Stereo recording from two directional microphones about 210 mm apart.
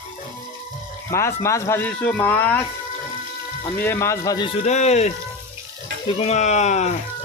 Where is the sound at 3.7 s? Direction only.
10° left (ahead or behind); by 7.0 s 35° left (ahead or behind).